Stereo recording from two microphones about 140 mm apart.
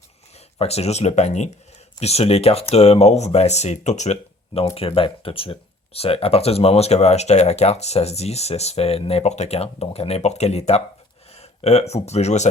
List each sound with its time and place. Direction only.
0.6 s speech: 45° left (ahead or behind)